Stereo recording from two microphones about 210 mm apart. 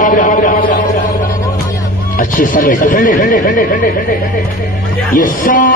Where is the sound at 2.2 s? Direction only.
40° left (ahead or behind).